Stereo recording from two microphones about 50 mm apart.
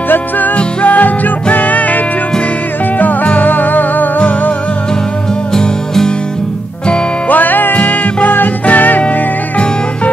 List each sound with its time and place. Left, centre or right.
0.6 s music: left
3.3 s music: left
5.5 s music: centre
7.2 s music: left